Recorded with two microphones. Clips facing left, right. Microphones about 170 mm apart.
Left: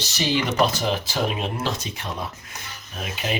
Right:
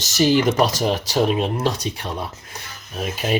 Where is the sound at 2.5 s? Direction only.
35° right (ahead or behind).